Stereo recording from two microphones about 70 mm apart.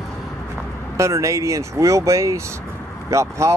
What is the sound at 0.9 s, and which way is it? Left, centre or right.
Speech, right.